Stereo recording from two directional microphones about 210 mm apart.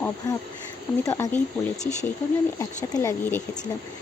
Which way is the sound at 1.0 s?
15° left (ahead or behind).